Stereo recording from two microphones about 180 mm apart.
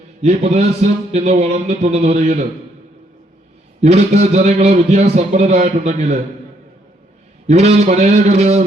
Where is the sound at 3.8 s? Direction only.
40° right (ahead or behind).